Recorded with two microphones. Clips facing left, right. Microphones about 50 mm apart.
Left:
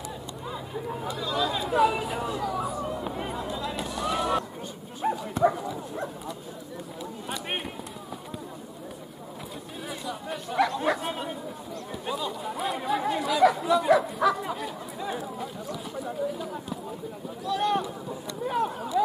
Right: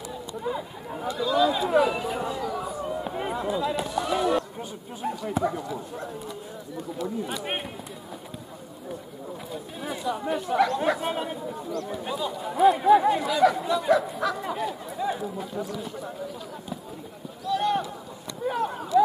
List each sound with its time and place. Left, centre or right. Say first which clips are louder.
0.8 s speech: right 5 dB; centre
1.8 s a sound: left 3 dB; centre
5.0 s speech: left 3 dB; centre
7.2 s speech: right 1 dB; centre
10.3 s speech: right 2 dB; centre
17.5 s boat: right 1 dB; centre
18.4 s a sound: even; centre